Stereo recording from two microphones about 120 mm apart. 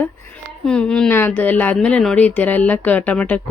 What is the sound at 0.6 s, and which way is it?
Speech, 10° left (ahead or behind).